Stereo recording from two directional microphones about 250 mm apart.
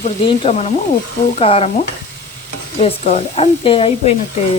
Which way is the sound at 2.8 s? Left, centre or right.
Left.